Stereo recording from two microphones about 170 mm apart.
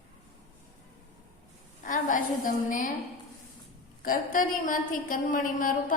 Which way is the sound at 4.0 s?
55° left (ahead or behind).